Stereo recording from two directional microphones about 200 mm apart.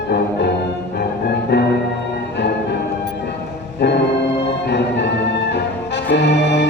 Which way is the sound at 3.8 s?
60° left (ahead or behind).